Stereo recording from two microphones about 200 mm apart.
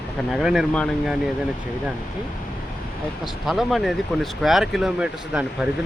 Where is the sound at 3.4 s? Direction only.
Centre (ahead or behind).